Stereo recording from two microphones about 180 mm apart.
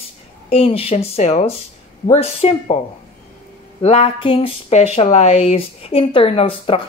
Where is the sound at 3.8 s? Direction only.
35° left (ahead or behind).